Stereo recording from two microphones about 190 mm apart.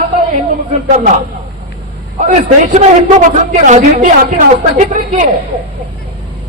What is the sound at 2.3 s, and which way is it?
A man's voice, 35° right (ahead or behind).